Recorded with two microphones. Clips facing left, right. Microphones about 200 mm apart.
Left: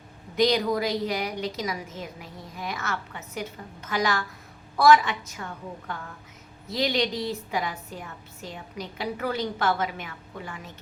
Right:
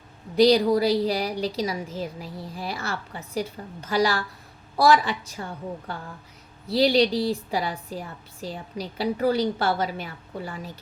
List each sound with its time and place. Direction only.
0.3 s a woman's voice: 35° right (ahead or behind)